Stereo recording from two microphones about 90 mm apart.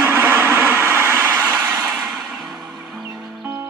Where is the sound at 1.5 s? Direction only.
40° right (ahead or behind).